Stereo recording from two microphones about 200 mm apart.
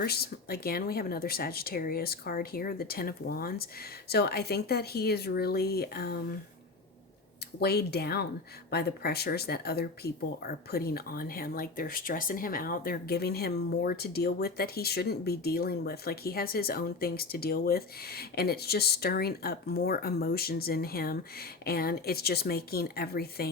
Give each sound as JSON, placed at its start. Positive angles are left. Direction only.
{"t": 0.0, "sound": "speech", "side_deg": 50}
{"t": 7.6, "sound": "speech", "side_deg": 50}